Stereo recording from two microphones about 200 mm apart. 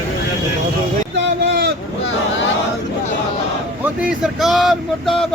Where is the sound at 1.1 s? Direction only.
60° right (ahead or behind).